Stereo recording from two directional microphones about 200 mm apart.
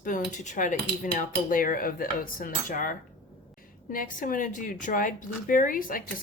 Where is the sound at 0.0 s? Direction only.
40° left (ahead or behind).